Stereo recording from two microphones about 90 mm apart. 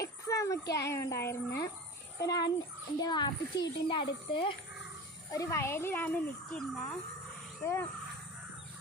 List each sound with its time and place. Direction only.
0.0 s a child's voice: 35° left (ahead or behind)
3.0 s a woman's voice: 55° left (ahead or behind)
5.3 s a child's voice: 35° left (ahead or behind); by 6.7 s 15° left (ahead or behind)
7.6 s a child's voice: 30° left (ahead or behind)